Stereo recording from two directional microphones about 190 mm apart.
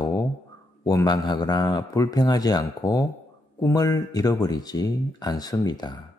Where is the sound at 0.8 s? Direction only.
20° left (ahead or behind).